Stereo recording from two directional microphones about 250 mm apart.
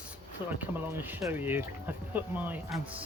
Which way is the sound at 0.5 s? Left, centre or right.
Centre.